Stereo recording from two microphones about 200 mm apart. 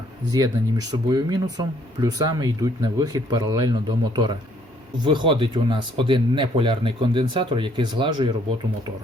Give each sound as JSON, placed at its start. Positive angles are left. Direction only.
{"t": 0.3, "sound": "speech", "side_deg": -15}